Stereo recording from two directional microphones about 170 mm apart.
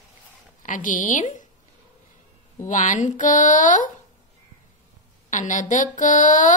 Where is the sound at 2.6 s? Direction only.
50° left (ahead or behind).